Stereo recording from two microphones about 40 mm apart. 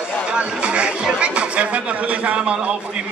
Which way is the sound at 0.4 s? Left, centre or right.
Right.